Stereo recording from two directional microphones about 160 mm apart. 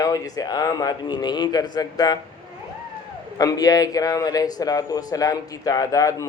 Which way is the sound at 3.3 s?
25° left (ahead or behind).